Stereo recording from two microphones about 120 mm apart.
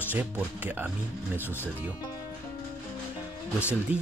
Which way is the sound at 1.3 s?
20° left (ahead or behind).